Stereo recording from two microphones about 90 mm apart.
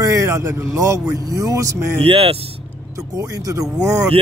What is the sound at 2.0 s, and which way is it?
Speech, 90° right.